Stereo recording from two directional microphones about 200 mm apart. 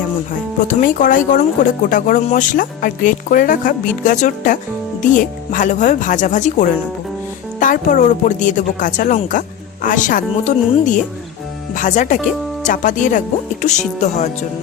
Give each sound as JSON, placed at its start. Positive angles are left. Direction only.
{"t": 0.7, "sound": "speech", "side_deg": 40}